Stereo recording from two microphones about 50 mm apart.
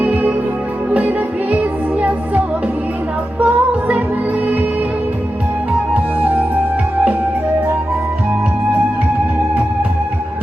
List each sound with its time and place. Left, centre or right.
0.0 s music: right
3.4 s music: right
5.9 s music: right